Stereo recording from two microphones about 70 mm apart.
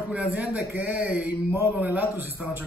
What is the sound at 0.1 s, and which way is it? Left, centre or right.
Speech, right.